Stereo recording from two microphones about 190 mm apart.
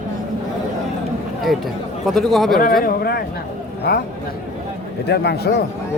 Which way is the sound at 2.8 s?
55° left (ahead or behind).